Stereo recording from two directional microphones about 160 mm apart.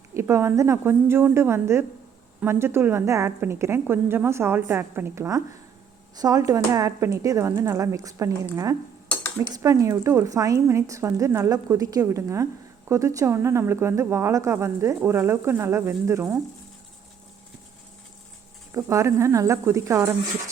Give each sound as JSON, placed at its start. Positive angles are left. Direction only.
{"t": 0.1, "sound": "speech", "side_deg": -15}
{"t": 9.5, "sound": "speech", "side_deg": -20}
{"t": 18.7, "sound": "speech", "side_deg": -20}